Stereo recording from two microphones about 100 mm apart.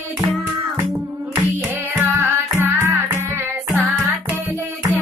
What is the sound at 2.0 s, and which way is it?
Music, 20° right (ahead or behind).